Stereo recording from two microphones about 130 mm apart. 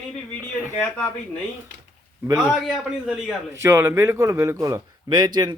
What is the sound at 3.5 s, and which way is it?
A man's voice, 20° right (ahead or behind).